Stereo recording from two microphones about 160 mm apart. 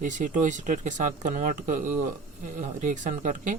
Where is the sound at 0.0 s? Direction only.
50° right (ahead or behind).